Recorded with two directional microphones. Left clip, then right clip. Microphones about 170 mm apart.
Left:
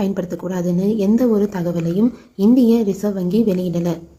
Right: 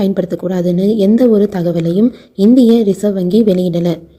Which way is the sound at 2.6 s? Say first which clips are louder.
Right 6 dB; 20° right (ahead or behind).